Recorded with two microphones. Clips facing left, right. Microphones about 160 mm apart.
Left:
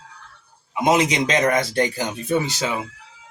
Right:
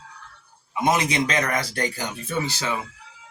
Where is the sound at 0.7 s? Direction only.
20° left (ahead or behind).